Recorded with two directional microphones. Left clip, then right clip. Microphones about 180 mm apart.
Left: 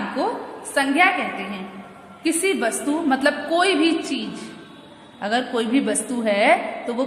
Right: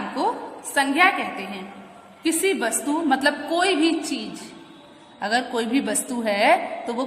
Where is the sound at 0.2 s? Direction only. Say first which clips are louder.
Right 1 dB; 20° right (ahead or behind).